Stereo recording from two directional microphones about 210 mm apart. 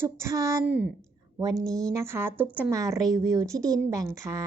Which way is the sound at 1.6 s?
5° left (ahead or behind).